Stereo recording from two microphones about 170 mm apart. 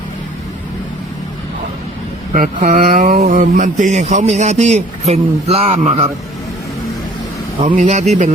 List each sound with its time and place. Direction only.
2.3 s speech: 50° right (ahead or behind)
7.8 s speech: 40° right (ahead or behind)